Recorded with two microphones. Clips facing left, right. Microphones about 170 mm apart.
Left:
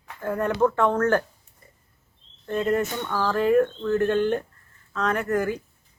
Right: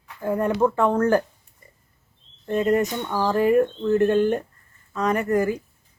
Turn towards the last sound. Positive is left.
turn(degrees=-10)  # may be behind; listen again after turning